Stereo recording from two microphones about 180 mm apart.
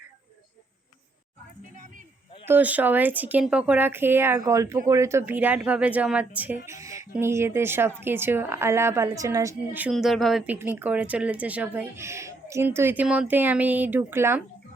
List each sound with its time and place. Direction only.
1.7 s speech: 45° right (ahead or behind)
2.5 s speech: 10° right (ahead or behind)
9.9 s speech: centre (ahead or behind)